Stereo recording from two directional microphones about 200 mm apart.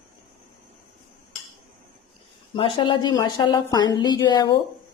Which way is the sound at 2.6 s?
25° left (ahead or behind).